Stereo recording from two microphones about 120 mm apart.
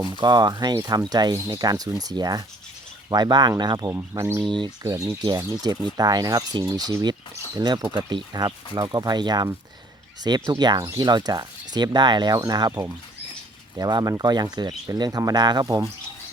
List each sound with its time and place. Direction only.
0.0 s speech: 35° right (ahead or behind)
3.9 s speech: 25° right (ahead or behind)
4.4 s speech: 40° right (ahead or behind)
4.8 s speech: 25° right (ahead or behind)